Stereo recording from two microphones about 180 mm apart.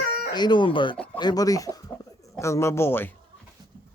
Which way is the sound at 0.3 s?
25° left (ahead or behind).